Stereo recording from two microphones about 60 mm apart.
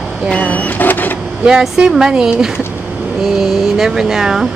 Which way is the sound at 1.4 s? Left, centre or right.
Centre.